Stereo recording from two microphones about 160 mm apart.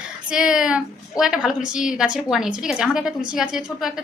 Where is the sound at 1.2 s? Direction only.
5° right (ahead or behind).